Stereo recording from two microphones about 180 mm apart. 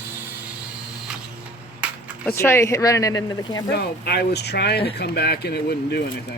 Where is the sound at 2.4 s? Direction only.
15° left (ahead or behind).